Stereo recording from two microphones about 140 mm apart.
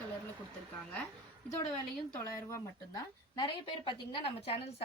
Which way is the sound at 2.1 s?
20° left (ahead or behind).